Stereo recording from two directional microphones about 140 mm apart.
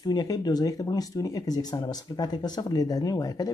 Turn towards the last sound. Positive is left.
turn(degrees=25)  # may be behind; listen again after turning